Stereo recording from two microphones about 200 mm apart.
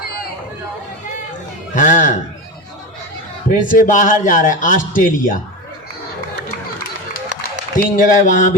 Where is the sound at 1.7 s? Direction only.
40° left (ahead or behind).